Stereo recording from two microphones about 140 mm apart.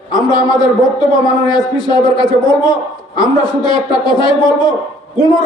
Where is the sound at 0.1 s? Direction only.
30° left (ahead or behind).